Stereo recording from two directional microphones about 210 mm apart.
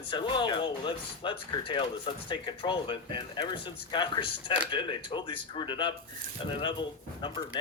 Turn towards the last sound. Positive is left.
turn(degrees=20)  # may be behind; listen again after turning